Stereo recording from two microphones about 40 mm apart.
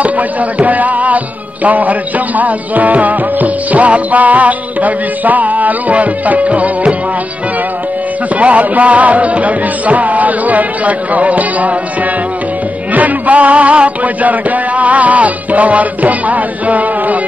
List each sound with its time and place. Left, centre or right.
0.0 s music: right
8.4 s music: right
12.9 s music: right